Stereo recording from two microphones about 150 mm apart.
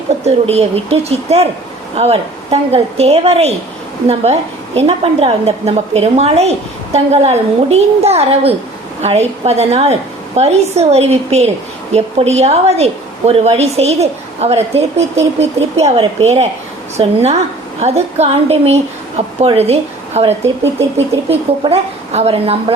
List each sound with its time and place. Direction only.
0.3 s a woman's voice: 45° right (ahead or behind)